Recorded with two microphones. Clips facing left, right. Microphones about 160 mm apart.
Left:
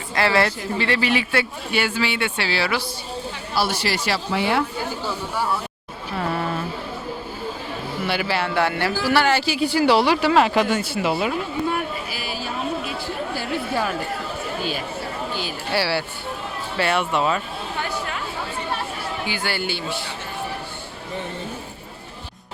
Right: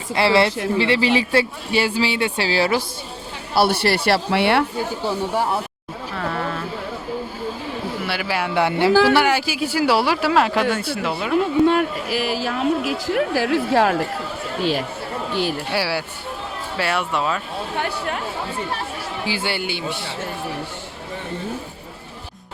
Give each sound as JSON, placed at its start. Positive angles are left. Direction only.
{"t": 0.1, "sound": "a man's voice", "side_deg": -25}
{"t": 3.5, "sound": "speech", "side_deg": -60}
{"t": 6.1, "sound": "a sound", "side_deg": 15}
{"t": 8.0, "sound": "speech", "side_deg": -5}
{"t": 8.9, "sound": "a man's voice", "side_deg": -90}
{"t": 9.1, "sound": "speech", "side_deg": -10}
{"t": 11.6, "sound": "speech", "side_deg": -75}
{"t": 15.7, "sound": "speech", "side_deg": -10}
{"t": 17.7, "sound": "chatter", "side_deg": -60}
{"t": 19.2, "sound": "speech", "side_deg": -30}